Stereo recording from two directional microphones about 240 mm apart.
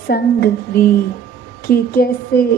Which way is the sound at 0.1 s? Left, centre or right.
Left.